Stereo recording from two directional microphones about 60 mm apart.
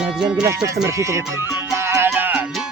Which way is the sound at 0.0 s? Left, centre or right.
Centre.